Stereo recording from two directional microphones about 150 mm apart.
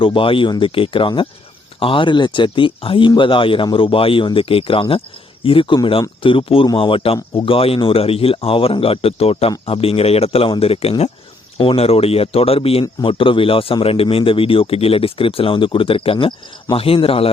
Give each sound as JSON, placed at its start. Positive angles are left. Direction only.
{"t": 0.0, "sound": "speech", "side_deg": 35}